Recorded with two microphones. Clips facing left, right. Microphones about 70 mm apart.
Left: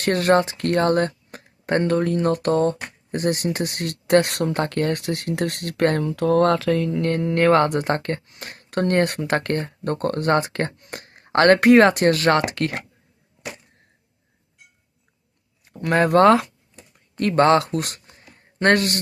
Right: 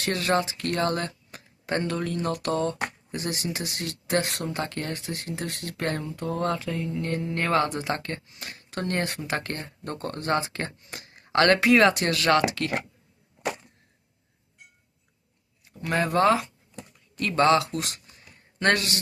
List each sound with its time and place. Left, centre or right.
0.0 s speech: left
6.1 s speech: left
7.1 s speech: left
15.6 s speech: left
17.2 s speech: left